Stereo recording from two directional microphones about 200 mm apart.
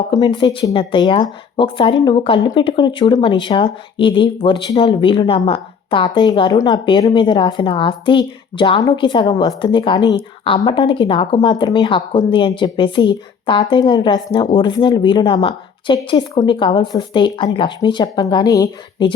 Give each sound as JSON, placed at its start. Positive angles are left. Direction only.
{"t": 0.1, "sound": "speech", "side_deg": 20}